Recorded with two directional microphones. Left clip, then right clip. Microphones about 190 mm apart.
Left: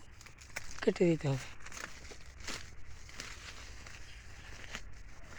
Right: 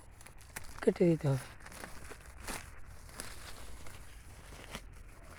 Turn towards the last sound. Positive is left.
turn(degrees=-65)  # may be behind; listen again after turning